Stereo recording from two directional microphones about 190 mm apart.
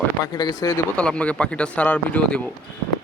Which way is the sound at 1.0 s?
5° left (ahead or behind).